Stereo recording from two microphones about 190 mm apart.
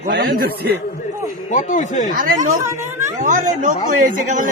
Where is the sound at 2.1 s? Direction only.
45° right (ahead or behind).